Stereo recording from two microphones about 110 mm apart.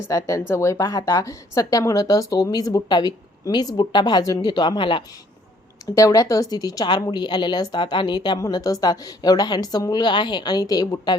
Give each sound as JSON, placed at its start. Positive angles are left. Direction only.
{"t": 0.1, "sound": "a woman's voice", "side_deg": 30}
{"t": 5.8, "sound": "a woman's voice", "side_deg": 30}